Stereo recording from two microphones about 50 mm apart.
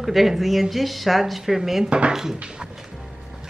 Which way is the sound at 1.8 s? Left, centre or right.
Right.